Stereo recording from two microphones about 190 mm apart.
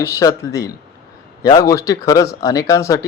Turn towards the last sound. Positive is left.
turn(degrees=20)  # may be behind; listen again after turning